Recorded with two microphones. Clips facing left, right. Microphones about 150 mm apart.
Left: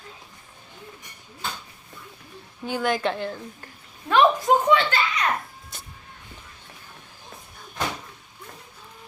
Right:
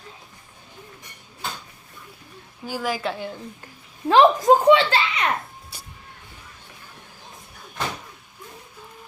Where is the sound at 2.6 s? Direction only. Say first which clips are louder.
Left 2 dB; 5° right (ahead or behind).